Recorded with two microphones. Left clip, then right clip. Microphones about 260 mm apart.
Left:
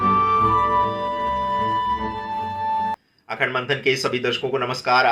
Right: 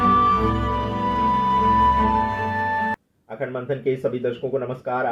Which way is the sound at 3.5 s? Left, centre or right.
Left.